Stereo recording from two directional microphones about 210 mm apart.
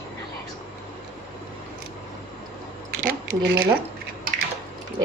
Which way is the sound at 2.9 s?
40° right (ahead or behind).